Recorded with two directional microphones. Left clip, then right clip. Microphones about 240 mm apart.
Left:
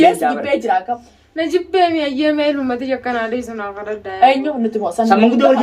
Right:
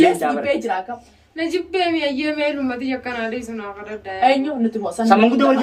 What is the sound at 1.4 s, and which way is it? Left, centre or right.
A woman's voice, centre.